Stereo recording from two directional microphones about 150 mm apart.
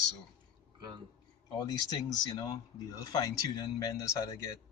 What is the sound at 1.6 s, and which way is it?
Speech, 25° left (ahead or behind).